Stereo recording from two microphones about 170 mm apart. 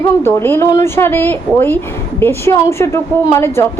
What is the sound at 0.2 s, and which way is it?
A woman's voice, 15° left (ahead or behind).